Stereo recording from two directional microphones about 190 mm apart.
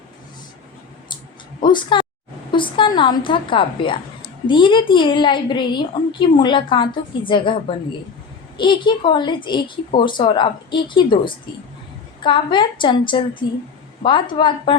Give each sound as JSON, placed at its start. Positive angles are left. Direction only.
{"t": 1.6, "sound": "a woman's voice", "side_deg": 25}